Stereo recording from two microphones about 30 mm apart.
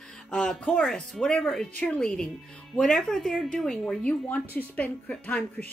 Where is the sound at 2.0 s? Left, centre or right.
Left.